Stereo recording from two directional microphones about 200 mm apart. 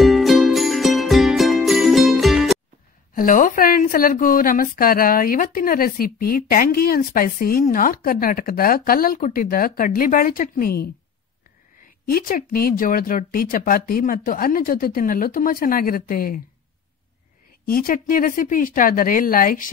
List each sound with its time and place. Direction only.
0.0 s music: centre (ahead or behind)
3.2 s a woman's voice: 45° left (ahead or behind)
12.1 s speech: 45° left (ahead or behind)
17.6 s speech: 45° left (ahead or behind)